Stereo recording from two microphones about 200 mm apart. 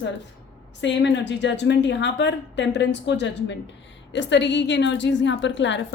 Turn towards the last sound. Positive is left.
turn(degrees=65)  # may be behind; listen again after turning